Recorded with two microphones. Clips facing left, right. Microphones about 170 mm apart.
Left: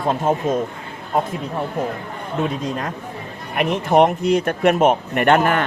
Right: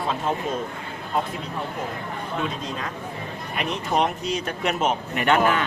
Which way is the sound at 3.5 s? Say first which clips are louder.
Left 8 dB; 55° left (ahead or behind).